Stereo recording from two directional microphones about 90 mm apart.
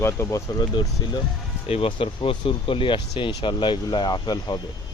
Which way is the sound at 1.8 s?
80° left.